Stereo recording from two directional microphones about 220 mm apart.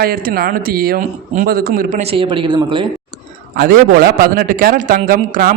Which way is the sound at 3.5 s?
40° right (ahead or behind).